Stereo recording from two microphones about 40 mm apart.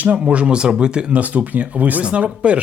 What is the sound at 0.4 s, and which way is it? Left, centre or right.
Speech, right.